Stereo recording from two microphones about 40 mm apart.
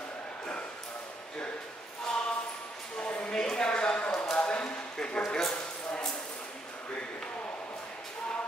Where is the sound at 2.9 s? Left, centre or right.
Left.